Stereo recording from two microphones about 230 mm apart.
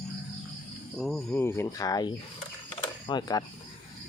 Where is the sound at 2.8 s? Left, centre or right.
Centre.